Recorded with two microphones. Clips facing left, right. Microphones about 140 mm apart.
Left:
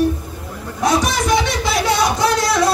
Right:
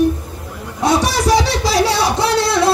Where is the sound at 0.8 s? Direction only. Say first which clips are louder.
Right 2 dB; 30° right (ahead or behind).